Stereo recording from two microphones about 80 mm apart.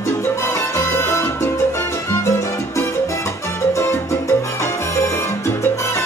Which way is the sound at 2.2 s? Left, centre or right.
Left.